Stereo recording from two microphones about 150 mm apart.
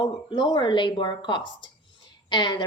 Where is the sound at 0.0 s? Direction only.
30° left (ahead or behind).